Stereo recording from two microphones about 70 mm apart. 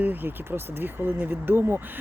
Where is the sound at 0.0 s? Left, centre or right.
Right.